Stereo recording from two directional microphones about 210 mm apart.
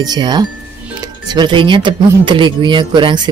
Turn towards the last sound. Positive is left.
turn(degrees=-20)  # may be behind; listen again after turning